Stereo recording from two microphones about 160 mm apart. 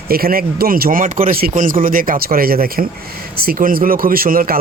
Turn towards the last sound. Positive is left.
turn(degrees=-65)  # may be behind; listen again after turning